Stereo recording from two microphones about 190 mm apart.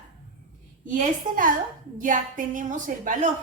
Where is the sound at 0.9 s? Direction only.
45° right (ahead or behind).